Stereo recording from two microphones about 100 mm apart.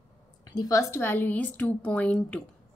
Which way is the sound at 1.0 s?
20° left (ahead or behind).